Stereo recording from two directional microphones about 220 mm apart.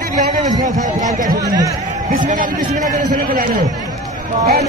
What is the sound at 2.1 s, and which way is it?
Speech, 40° right (ahead or behind).